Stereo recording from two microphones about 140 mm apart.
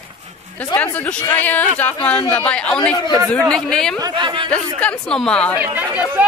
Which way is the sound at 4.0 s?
35° right (ahead or behind).